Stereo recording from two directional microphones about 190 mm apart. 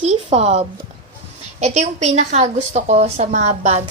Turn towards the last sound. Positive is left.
turn(degrees=-35)  # may be behind; listen again after turning